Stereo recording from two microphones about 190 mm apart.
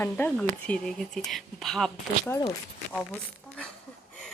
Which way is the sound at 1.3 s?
Centre (ahead or behind).